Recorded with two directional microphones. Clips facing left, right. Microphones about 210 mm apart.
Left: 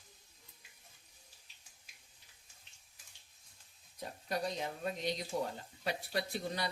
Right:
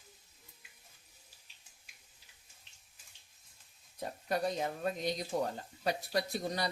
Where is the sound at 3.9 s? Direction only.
50° right (ahead or behind).